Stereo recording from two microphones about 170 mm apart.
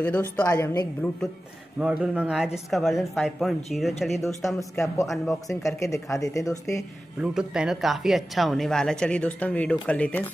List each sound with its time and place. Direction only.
0.0 s speech: 10° left (ahead or behind)
1.8 s speech: 5° right (ahead or behind)
4.6 s speech: 20° left (ahead or behind)
5.0 s speech: centre (ahead or behind)
5.5 s speech: 20° left (ahead or behind)
7.2 s speech: 5° right (ahead or behind)